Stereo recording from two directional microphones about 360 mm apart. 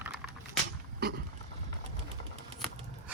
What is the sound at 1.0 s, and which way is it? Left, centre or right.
Speech, right.